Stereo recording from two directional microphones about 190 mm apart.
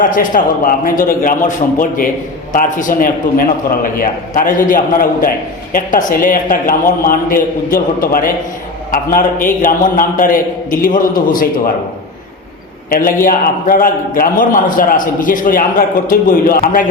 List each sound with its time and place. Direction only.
0.0 s a man's voice: 45° left (ahead or behind)
2.5 s a man's voice: 40° left (ahead or behind)
12.9 s a man's voice: 50° left (ahead or behind)